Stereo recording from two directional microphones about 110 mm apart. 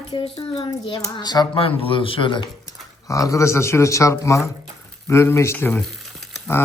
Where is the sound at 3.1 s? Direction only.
30° left (ahead or behind).